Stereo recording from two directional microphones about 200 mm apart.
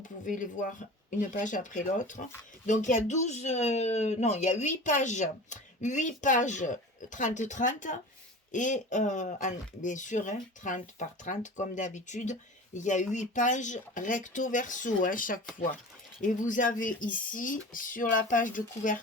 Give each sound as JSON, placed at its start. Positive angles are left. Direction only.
{"t": 0.0, "sound": "speech", "side_deg": 40}